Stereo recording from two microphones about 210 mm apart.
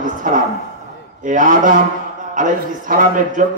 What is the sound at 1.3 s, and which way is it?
Speech, 40° right (ahead or behind).